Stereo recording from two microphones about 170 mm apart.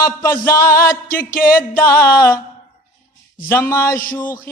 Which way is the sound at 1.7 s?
15° left (ahead or behind).